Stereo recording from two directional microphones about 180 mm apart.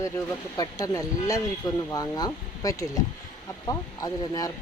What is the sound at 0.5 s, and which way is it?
Speech, 20° left (ahead or behind).